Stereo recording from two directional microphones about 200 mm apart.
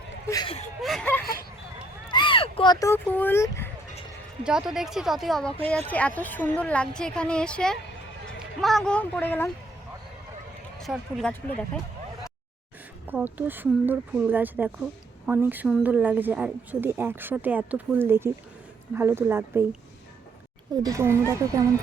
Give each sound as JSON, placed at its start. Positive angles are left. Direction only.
{"t": 0.3, "sound": "speech", "side_deg": 20}
{"t": 0.8, "sound": "a woman's voice", "side_deg": 0}
{"t": 2.0, "sound": "speech", "side_deg": 25}
{"t": 4.4, "sound": "a woman's voice", "side_deg": -5}
{"t": 10.8, "sound": "a woman's voice", "side_deg": 0}
{"t": 13.1, "sound": "a woman's voice", "side_deg": -10}
{"t": 20.8, "sound": "a woman's voice", "side_deg": -15}